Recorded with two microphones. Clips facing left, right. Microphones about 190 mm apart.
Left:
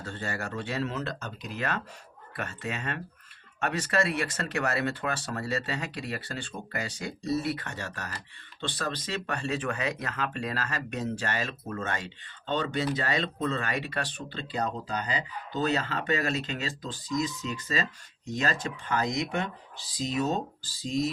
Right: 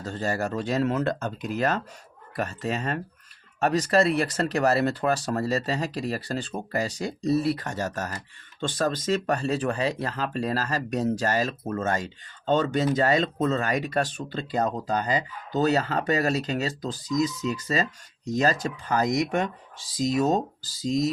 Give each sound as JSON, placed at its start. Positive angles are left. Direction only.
{"t": 0.0, "sound": "speech", "side_deg": -40}